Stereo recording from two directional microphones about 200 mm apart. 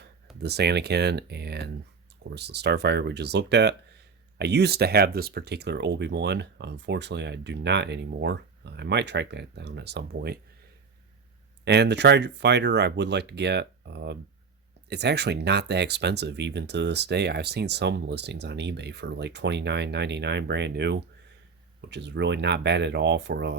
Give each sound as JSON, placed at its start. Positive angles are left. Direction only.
{"t": 0.4, "sound": "speech", "side_deg": -55}
{"t": 11.6, "sound": "speech", "side_deg": -55}